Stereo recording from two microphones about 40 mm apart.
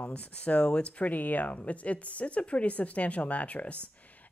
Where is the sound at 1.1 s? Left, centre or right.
Left.